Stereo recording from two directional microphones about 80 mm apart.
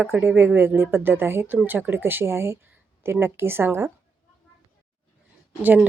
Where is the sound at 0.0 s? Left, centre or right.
Right.